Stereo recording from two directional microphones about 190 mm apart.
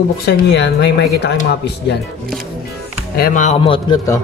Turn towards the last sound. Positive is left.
turn(degrees=30)  # may be behind; listen again after turning